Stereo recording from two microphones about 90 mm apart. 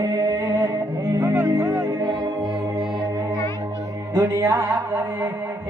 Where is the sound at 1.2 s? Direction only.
25° right (ahead or behind).